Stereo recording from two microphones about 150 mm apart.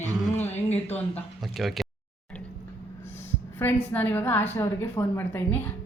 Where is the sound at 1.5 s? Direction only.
Centre (ahead or behind).